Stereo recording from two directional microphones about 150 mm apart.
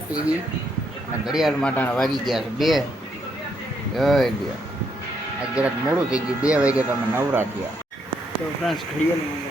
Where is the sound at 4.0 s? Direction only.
Centre (ahead or behind).